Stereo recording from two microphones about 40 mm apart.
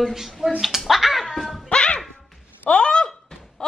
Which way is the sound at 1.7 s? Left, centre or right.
Left.